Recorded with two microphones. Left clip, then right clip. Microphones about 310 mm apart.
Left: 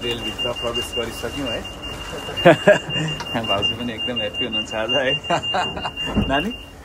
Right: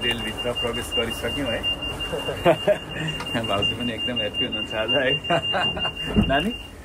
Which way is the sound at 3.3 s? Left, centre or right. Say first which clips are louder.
Left 3 dB; centre.